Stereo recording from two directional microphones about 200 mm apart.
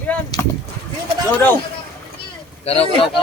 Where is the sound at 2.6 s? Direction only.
30° left (ahead or behind).